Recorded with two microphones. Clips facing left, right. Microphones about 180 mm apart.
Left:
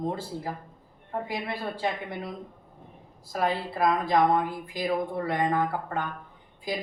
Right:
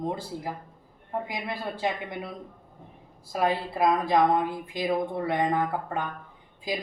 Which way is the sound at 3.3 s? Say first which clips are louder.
Right 1 dB; 20° right (ahead or behind).